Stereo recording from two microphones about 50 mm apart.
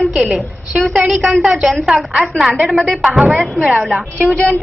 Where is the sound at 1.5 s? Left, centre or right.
Right.